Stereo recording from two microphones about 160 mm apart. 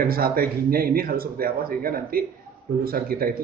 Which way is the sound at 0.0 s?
70° right (ahead or behind).